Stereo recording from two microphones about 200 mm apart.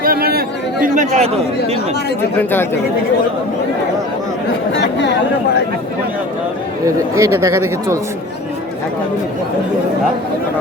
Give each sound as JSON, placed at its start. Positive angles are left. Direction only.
{"t": 0.0, "sound": "chatter", "side_deg": -45}
{"t": 2.4, "sound": "speech", "side_deg": 10}
{"t": 4.7, "sound": "speech", "side_deg": 60}
{"t": 6.8, "sound": "speech", "side_deg": -15}